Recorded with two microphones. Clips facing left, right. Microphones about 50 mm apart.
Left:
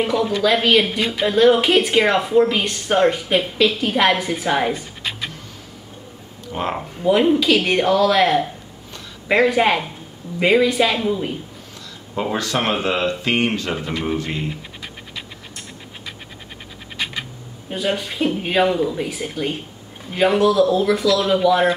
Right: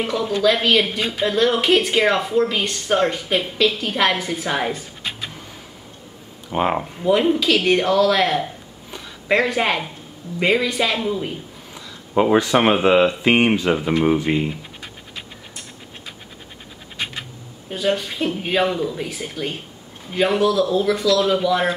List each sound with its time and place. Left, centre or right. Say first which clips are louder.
0.0 s speech: left 1 dB; centre
6.5 s speech: right 4 dB; centre
6.8 s speech: left 1 dB; centre
12.2 s speech: right 6 dB; centre
17.6 s speech: right 1 dB; centre